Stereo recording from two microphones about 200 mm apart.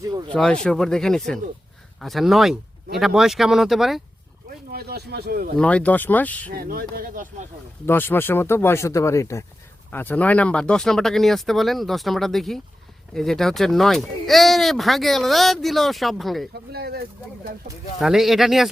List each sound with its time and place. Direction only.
0.0 s speech: 20° right (ahead or behind)
0.3 s speech: 5° left (ahead or behind)
4.7 s speech: 50° right (ahead or behind)
5.5 s speech: 5° left (ahead or behind)
6.5 s speech: 45° right (ahead or behind)
7.9 s speech: 10° left (ahead or behind)
16.7 s speech: 50° right (ahead or behind)
18.0 s speech: centre (ahead or behind)